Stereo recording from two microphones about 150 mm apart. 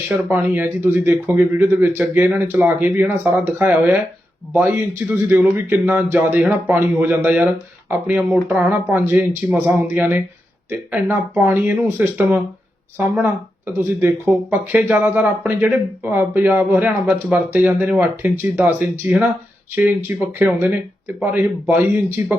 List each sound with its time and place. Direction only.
0.3 s a man's voice: 10° right (ahead or behind)
13.7 s a man's voice: 15° right (ahead or behind)